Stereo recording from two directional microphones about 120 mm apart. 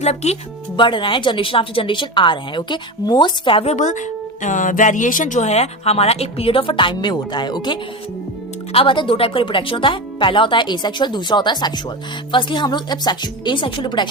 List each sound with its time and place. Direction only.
0.0 s speech: 65° left (ahead or behind)
0.8 s speech: 45° left (ahead or behind)
3.7 s a woman's voice: 90° left; by 14.1 s 40° left (ahead or behind)